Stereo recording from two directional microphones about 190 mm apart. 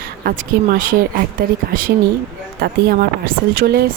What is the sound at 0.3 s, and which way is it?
Speech, 50° right (ahead or behind).